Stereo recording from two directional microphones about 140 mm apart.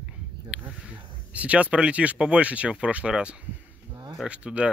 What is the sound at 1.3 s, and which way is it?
Speech, 10° right (ahead or behind).